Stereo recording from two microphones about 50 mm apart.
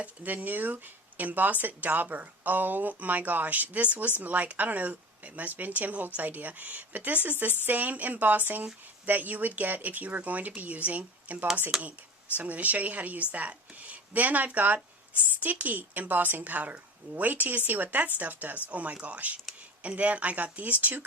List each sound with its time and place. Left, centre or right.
0.0 s speech: right
11.7 s speech: centre
12.4 s speech: right